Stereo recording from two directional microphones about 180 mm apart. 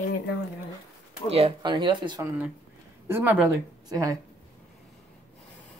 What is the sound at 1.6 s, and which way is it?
Speech, 25° right (ahead or behind).